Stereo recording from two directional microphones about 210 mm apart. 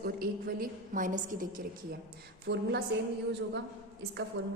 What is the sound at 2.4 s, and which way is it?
Speech, 55° right (ahead or behind).